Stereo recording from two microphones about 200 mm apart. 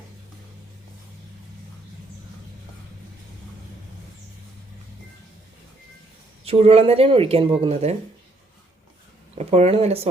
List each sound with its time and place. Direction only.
6.4 s speech: 30° right (ahead or behind)
9.4 s speech: 30° right (ahead or behind)